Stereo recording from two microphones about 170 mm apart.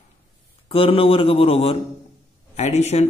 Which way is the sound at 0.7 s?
35° left (ahead or behind).